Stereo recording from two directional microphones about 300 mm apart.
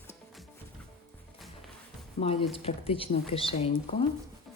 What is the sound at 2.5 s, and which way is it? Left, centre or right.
Speech, centre.